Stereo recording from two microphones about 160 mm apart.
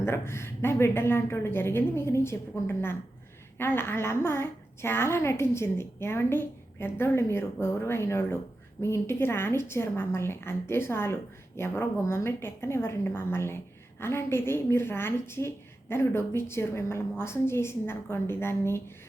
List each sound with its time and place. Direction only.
0.0 s a woman's voice: 15° left (ahead or behind)